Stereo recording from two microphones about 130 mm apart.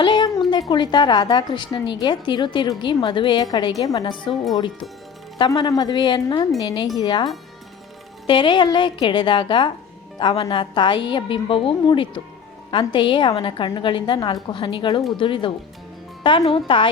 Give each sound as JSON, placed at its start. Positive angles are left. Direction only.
{"t": 0.0, "sound": "a woman's voice", "side_deg": 35}
{"t": 8.3, "sound": "a woman's voice", "side_deg": 35}